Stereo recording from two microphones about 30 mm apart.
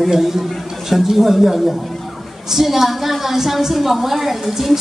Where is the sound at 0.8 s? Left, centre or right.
Centre.